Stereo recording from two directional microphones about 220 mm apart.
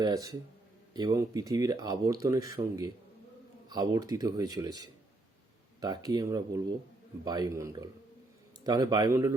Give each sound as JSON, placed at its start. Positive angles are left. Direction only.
{"t": 0.0, "sound": "speech", "side_deg": -15}
{"t": 5.8, "sound": "speech", "side_deg": -15}